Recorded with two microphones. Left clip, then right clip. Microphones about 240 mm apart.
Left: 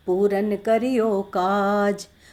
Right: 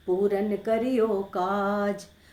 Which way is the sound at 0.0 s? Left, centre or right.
Left.